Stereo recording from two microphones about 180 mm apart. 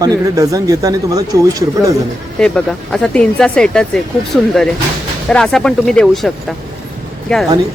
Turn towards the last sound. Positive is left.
turn(degrees=0)  # may be behind; listen again after turning